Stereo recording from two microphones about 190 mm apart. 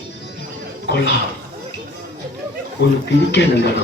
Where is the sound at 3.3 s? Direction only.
65° left (ahead or behind).